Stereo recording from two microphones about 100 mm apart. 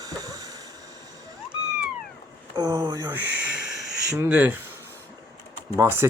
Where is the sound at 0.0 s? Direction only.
40° right (ahead or behind).